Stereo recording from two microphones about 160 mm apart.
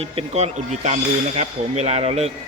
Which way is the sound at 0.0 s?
40° right (ahead or behind).